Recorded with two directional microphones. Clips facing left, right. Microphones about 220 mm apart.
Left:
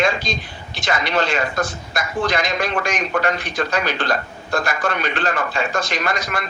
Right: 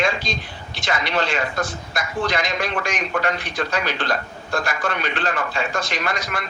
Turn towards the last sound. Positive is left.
turn(degrees=45)  # may be behind; listen again after turning